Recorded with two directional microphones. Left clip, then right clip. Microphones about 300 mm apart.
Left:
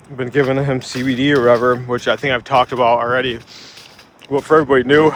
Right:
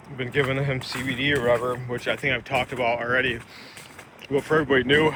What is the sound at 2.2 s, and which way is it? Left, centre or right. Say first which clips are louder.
Speech: left 10 dB; centre.